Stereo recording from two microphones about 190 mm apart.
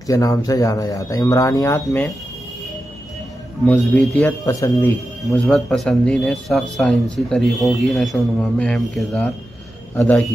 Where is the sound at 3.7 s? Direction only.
5° left (ahead or behind).